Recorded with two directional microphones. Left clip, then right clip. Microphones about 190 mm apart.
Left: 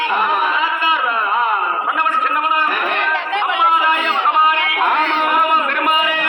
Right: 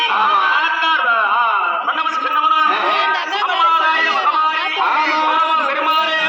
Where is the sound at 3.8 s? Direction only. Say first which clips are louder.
Even; 30° left (ahead or behind).